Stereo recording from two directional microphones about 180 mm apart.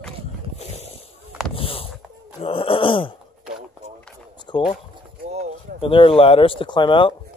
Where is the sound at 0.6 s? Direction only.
35° left (ahead or behind).